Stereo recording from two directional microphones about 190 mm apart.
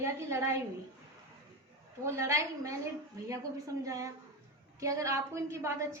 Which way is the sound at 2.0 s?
15° right (ahead or behind).